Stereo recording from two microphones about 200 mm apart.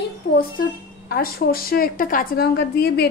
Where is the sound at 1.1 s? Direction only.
50° left (ahead or behind).